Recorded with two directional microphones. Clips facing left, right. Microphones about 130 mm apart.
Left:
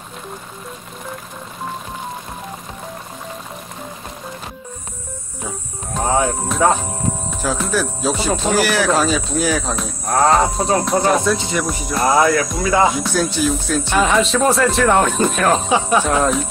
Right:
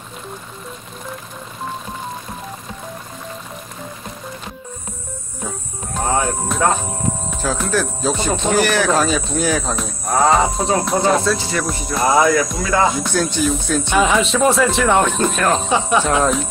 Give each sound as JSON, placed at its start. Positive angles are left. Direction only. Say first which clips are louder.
{"t": 6.0, "sound": "music", "louder": "left 2 dB", "side_deg": 15}
{"t": 7.4, "sound": "speech", "louder": "even", "side_deg": 5}
{"t": 11.3, "sound": "speech", "louder": "left 1 dB", "side_deg": 20}
{"t": 11.9, "sound": "speech", "louder": "even", "side_deg": 0}